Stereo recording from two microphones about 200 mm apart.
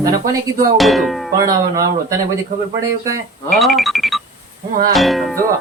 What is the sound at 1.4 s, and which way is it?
A man's voice, 15° right (ahead or behind).